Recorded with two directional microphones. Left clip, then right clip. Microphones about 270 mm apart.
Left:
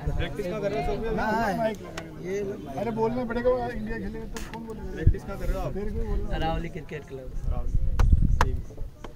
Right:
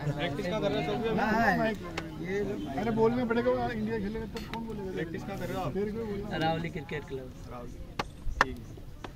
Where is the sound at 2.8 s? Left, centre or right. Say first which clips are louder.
Even; centre.